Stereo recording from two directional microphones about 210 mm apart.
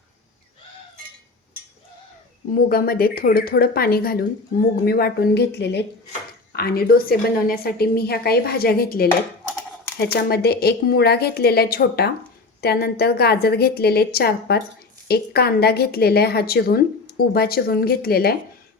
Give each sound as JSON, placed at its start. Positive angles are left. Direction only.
{"t": 2.5, "sound": "a woman's voice", "side_deg": 45}